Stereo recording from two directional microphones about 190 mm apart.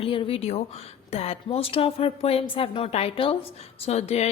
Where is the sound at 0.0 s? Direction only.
30° left (ahead or behind).